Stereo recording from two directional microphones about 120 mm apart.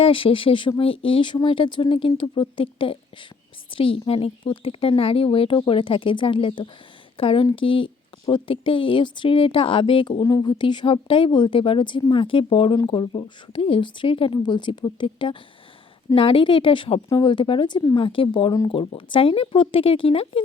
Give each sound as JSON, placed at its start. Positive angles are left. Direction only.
{"t": 0.0, "sound": "speech", "side_deg": 50}
{"t": 12.7, "sound": "speech", "side_deg": 35}